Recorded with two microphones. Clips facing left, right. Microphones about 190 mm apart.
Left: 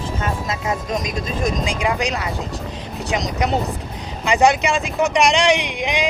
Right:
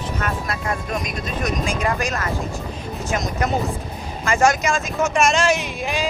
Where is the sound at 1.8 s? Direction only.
15° left (ahead or behind).